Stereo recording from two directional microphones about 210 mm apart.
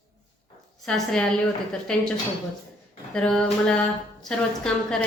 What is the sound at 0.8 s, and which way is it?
Speech, 5° left (ahead or behind).